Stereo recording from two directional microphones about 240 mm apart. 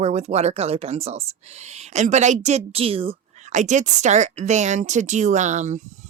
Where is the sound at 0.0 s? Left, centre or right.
Right.